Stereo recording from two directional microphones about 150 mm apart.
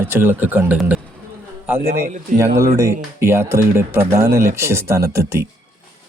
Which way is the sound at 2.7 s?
20° right (ahead or behind).